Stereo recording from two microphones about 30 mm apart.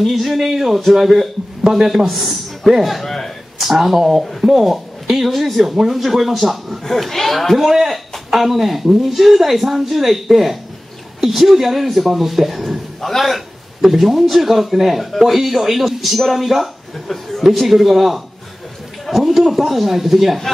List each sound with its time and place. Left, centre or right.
0.0 s speech: centre
2.0 s a man's voice: centre
4.2 s speech: centre
4.5 s speech: centre
6.8 s speech: centre
7.5 s speech: centre
13.0 s speech: centre
13.7 s speech: centre